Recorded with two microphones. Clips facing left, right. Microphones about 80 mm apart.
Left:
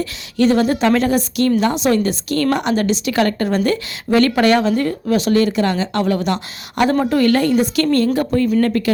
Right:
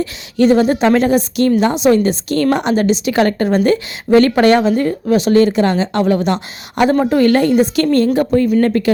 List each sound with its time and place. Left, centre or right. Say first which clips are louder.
0.0 s a woman's voice: right 3 dB; right